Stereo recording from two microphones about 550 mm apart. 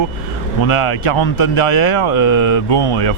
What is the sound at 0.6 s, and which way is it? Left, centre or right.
Speech, left.